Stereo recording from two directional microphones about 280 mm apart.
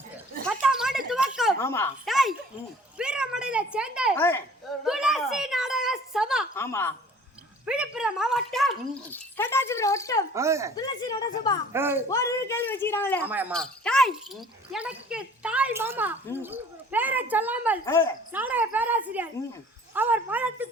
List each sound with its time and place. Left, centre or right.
0.4 s a sound: centre
1.6 s speech: centre
2.0 s a sound: centre
3.0 s speech: centre
4.1 s a child's voice: centre
6.6 s speech: centre
7.6 s speech: centre
10.3 s speech: centre
10.8 s speech: centre
11.7 s speech: centre
12.0 s speech: centre
13.2 s speech: centre
17.8 s speech: centre
18.3 s speech: centre